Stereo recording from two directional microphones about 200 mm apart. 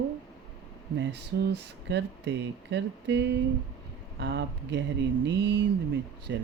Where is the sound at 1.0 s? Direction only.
60° right (ahead or behind).